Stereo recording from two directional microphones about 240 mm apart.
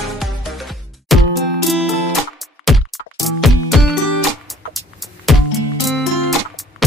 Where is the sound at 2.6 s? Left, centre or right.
Centre.